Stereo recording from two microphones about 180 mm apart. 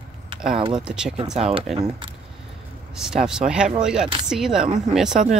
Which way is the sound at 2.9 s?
5° right (ahead or behind).